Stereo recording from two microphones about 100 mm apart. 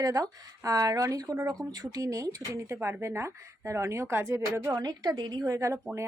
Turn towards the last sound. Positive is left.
turn(degrees=-30)  # may be behind; listen again after turning